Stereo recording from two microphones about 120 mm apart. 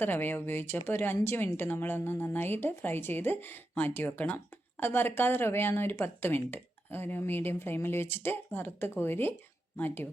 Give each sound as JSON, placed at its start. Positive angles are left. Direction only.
{"t": 0.0, "sound": "a woman's voice", "side_deg": 15}